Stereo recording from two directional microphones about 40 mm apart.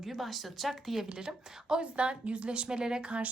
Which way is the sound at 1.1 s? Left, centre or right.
Centre.